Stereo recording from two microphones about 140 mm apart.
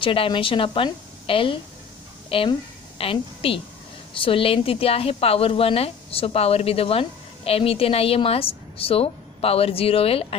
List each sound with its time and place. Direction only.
0.0 s a woman's voice: 40° left (ahead or behind)